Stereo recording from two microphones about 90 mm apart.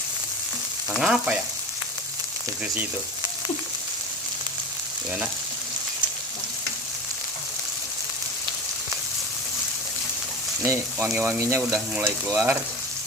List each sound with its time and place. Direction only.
0.9 s frying: 10° right (ahead or behind)
10.6 s frying: 25° right (ahead or behind)